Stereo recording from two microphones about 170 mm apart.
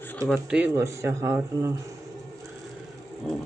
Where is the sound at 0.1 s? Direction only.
10° left (ahead or behind).